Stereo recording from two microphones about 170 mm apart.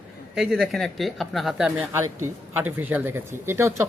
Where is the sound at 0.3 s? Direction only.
Centre (ahead or behind).